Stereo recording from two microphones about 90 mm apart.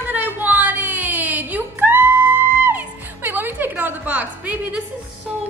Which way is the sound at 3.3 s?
20° right (ahead or behind).